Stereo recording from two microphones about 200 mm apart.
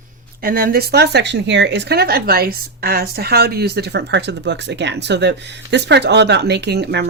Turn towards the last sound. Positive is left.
turn(degrees=-55)  # may be behind; listen again after turning